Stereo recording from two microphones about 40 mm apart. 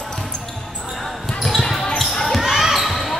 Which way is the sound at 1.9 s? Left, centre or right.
Centre.